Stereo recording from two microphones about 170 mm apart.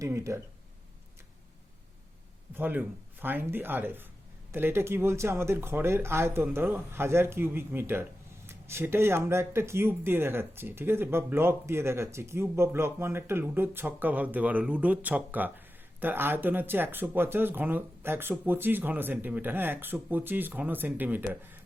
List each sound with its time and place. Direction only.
0.0 s speech: 15° right (ahead or behind)
2.6 s speech: 10° right (ahead or behind)